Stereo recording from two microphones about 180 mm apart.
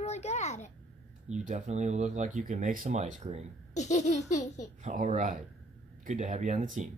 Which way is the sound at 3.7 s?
40° left (ahead or behind).